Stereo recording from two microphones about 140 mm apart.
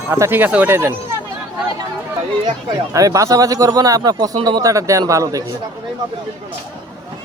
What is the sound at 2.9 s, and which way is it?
Speech, 25° right (ahead or behind).